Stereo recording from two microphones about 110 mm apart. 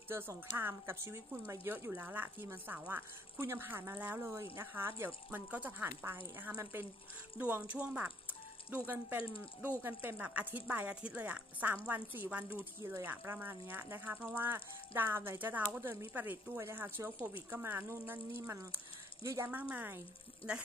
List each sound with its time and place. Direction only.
0.1 s speech: 20° right (ahead or behind)